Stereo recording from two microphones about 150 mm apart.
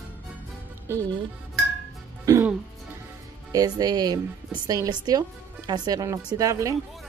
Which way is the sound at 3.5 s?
25° right (ahead or behind).